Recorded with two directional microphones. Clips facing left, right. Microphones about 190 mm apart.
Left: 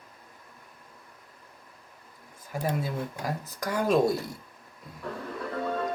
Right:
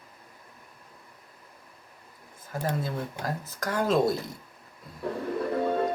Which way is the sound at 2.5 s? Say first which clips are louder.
Even; 10° left (ahead or behind).